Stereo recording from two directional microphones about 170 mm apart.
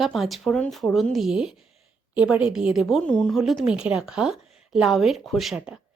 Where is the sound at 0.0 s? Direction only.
Centre (ahead or behind).